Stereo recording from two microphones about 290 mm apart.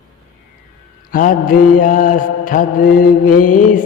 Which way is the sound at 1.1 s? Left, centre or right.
Left.